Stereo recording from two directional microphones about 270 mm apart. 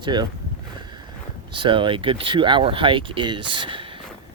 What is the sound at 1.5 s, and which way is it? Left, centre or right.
Speech, centre.